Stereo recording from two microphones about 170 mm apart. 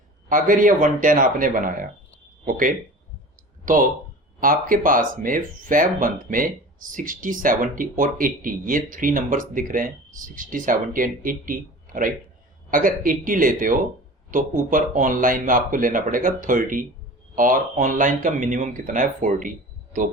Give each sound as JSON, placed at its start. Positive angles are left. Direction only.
{"t": 0.3, "sound": "speech", "side_deg": -50}